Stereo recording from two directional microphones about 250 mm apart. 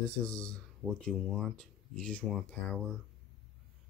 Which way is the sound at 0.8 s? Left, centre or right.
Centre.